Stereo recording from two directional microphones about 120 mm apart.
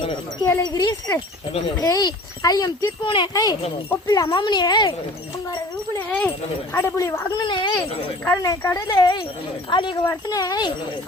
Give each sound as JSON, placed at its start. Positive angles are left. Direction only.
{"t": 0.6, "sound": "speech", "side_deg": 30}
{"t": 3.0, "sound": "speech", "side_deg": 45}
{"t": 3.3, "sound": "speech", "side_deg": 30}
{"t": 6.1, "sound": "speech", "side_deg": 10}
{"t": 6.7, "sound": "speech", "side_deg": 25}
{"t": 7.3, "sound": "speech", "side_deg": 40}
{"t": 8.4, "sound": "speech", "side_deg": 30}
{"t": 10.1, "sound": "speech", "side_deg": 30}